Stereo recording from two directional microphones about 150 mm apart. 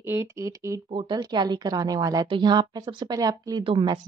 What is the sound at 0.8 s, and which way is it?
A woman's voice, 35° right (ahead or behind).